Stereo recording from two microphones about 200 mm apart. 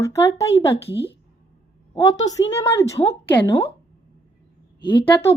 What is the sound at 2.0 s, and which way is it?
A woman's voice, 15° left (ahead or behind).